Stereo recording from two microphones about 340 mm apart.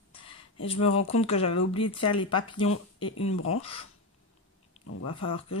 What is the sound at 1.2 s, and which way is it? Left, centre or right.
Speech, centre.